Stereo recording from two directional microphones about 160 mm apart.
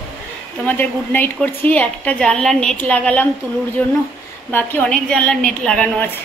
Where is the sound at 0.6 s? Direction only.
10° left (ahead or behind).